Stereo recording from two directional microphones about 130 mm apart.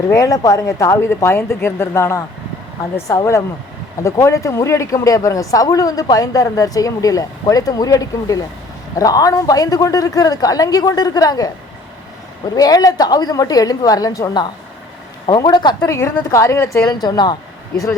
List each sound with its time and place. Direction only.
0.1 s speech: 25° left (ahead or behind)
12.5 s a woman's voice: 30° left (ahead or behind)